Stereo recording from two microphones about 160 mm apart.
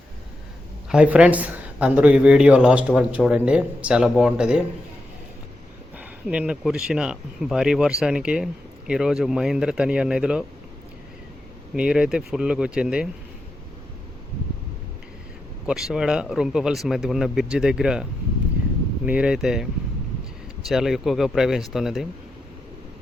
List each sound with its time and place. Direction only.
0.9 s speech: 5° right (ahead or behind)
6.0 s speech: 5° right (ahead or behind)
11.7 s speech: 5° right (ahead or behind)
15.6 s speech: 5° right (ahead or behind)
19.0 s speech: 5° right (ahead or behind)
20.7 s speech: centre (ahead or behind)